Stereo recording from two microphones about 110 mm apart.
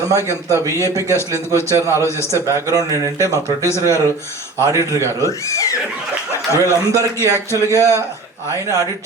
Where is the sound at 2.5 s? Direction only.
30° right (ahead or behind).